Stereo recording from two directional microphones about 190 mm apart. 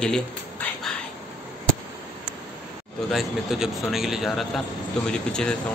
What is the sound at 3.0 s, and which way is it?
A man's voice, centre (ahead or behind).